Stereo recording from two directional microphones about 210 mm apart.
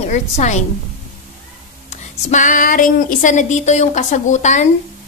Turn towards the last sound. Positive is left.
turn(degrees=35)  # may be behind; listen again after turning